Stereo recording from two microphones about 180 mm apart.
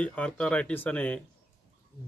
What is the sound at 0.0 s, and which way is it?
Speech, 5° left (ahead or behind).